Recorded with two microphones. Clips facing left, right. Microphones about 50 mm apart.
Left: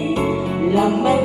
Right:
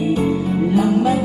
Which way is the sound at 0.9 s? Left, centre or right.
Left.